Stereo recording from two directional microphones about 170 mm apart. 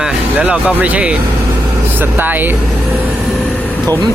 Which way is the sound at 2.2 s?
10° right (ahead or behind).